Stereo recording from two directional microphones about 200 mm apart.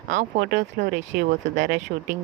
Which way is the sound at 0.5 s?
55° right (ahead or behind).